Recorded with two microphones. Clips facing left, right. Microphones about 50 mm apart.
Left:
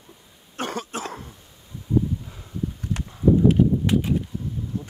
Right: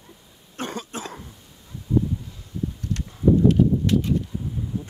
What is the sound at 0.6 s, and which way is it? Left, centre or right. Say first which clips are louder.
Cough: left 2 dB; left.